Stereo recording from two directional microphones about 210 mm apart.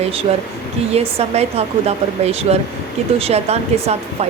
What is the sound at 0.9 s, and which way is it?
Speech, 30° right (ahead or behind).